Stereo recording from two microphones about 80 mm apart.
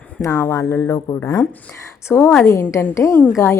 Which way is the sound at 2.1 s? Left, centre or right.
Left.